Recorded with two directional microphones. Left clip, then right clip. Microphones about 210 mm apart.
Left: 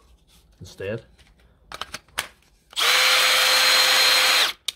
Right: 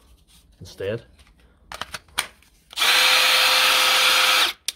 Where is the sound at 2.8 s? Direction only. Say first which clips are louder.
Right 1 dB; 15° left (ahead or behind).